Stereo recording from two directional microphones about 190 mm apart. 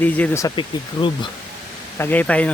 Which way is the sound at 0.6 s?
25° left (ahead or behind).